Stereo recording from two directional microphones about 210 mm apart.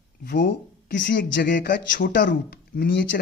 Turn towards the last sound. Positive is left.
turn(degrees=50)  # may be behind; listen again after turning